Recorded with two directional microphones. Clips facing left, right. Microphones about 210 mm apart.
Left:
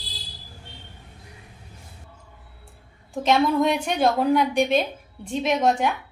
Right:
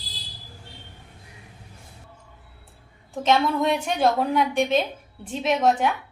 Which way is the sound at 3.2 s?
Centre (ahead or behind).